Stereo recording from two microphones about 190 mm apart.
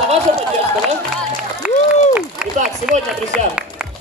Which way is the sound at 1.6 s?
5° right (ahead or behind).